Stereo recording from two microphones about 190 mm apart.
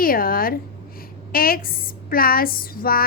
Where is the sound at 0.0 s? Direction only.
50° left (ahead or behind).